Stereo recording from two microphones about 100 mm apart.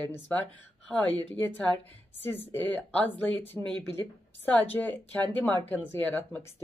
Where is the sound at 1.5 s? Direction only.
20° left (ahead or behind).